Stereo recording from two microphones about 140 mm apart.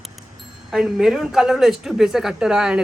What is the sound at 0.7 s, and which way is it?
Speech, 5° right (ahead or behind).